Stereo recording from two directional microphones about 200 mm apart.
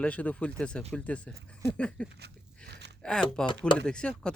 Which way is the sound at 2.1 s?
55° right (ahead or behind).